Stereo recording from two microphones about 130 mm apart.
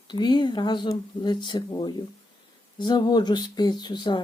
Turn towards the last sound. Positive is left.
turn(degrees=35)  # may be behind; listen again after turning